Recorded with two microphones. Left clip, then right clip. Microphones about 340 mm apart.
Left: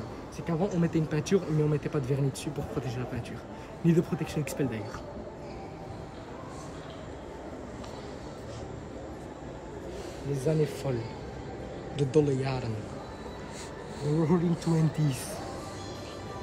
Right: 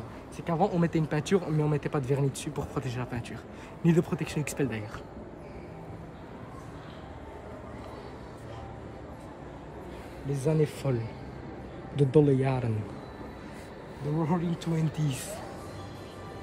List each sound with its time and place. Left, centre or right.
0.5 s speech: centre
10.3 s speech: right
11.9 s speech: right
14.2 s speech: centre